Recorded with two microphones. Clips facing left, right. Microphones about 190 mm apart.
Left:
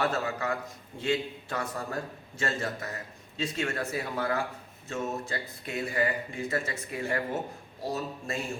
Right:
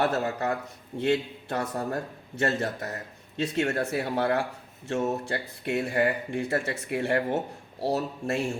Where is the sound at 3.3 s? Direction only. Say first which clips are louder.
Right 5 dB; 60° right (ahead or behind).